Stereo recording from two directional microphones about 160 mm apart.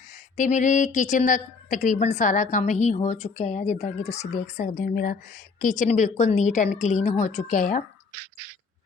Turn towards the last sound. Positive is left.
turn(degrees=55)  # may be behind; listen again after turning